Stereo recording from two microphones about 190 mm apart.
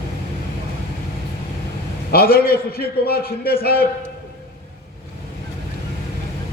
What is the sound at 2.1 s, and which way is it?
A man's voice, 55° left (ahead or behind).